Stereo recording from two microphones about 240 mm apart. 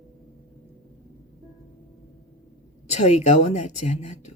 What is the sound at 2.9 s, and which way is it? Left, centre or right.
Speech, left.